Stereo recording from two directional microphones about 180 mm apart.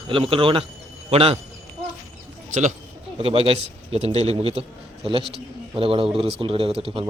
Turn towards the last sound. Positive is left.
turn(degrees=-30)  # may be behind; listen again after turning